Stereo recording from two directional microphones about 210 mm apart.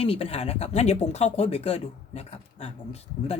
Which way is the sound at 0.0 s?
25° left (ahead or behind).